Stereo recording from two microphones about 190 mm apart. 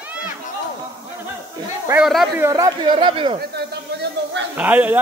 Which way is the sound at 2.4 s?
15° right (ahead or behind).